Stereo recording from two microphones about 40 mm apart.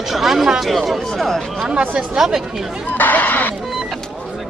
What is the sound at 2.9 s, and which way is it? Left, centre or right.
Speech, left.